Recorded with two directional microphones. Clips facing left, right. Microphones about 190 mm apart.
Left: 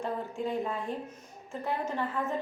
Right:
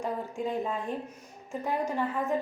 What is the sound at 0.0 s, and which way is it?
Speech, 15° right (ahead or behind).